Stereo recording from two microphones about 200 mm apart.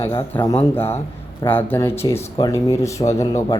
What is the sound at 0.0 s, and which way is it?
A man's voice, 15° left (ahead or behind).